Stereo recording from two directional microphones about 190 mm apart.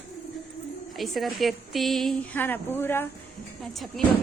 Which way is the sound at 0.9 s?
Centre (ahead or behind).